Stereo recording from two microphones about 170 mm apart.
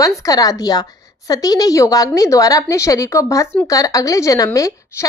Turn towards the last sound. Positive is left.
turn(degrees=20)  # may be behind; listen again after turning